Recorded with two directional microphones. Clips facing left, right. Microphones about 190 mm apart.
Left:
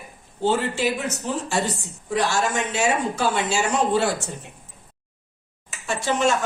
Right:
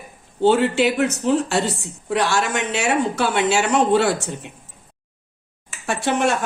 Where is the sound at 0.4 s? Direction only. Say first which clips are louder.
Right 6 dB; 70° right (ahead or behind).